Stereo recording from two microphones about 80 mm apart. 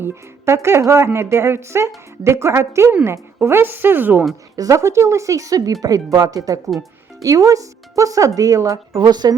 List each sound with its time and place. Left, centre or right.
0.0 s speech: right
4.5 s speech: right
9.0 s speech: right